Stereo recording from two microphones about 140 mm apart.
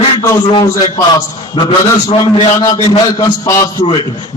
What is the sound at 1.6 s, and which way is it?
A man's voice, 35° left (ahead or behind).